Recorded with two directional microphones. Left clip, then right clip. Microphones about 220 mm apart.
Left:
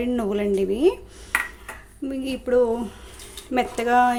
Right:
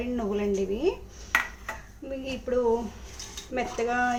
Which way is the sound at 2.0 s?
45° left (ahead or behind).